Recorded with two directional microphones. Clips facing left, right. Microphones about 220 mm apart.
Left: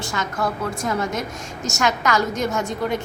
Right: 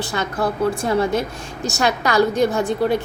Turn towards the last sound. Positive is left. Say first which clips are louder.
# right 5 dB
turn(degrees=-35)  # may be behind; listen again after turning